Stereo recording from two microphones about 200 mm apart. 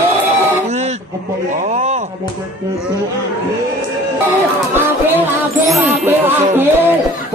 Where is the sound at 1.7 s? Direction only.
35° right (ahead or behind).